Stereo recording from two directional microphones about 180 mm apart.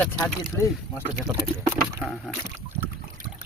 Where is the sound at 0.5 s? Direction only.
15° left (ahead or behind).